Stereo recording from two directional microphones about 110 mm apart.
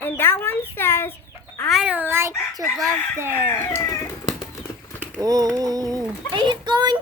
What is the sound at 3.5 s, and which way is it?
Speech, 25° left (ahead or behind).